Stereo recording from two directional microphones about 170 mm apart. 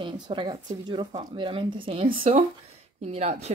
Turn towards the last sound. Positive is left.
turn(degrees=-40)  # may be behind; listen again after turning